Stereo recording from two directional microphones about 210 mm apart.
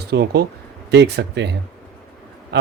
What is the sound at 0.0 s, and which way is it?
Speech, 50° right (ahead or behind).